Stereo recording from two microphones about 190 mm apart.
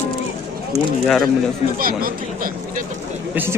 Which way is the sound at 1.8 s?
50° right (ahead or behind).